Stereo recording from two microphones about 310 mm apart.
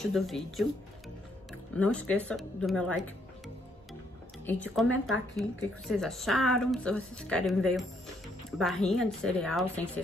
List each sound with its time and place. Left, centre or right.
0.0 s speech: centre
1.8 s speech: centre
4.5 s speech: centre